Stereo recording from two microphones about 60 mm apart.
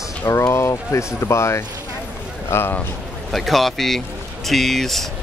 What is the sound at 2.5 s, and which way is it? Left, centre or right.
Speech, left.